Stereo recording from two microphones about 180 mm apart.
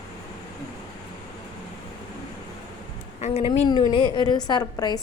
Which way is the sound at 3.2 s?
30° left (ahead or behind).